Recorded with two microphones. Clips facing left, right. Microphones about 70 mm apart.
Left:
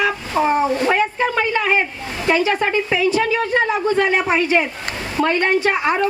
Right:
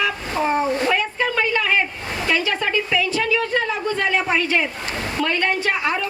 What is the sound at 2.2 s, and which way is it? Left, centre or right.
A woman's voice, left.